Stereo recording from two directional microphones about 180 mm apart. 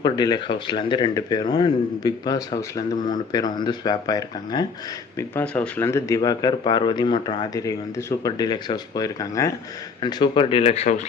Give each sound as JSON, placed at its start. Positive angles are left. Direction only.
{"t": 0.0, "sound": "speech", "side_deg": 25}
{"t": 5.1, "sound": "speech", "side_deg": 10}